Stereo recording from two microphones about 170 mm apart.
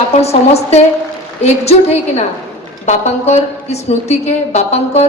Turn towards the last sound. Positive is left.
turn(degrees=40)  # may be behind; listen again after turning